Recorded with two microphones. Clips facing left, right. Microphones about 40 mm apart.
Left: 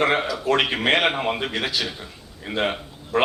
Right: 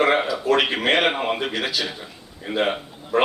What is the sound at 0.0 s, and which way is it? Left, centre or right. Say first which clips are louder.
A man's voice: right 2 dB; centre.